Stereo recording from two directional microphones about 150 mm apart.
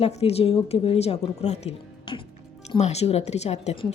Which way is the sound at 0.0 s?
45° left (ahead or behind).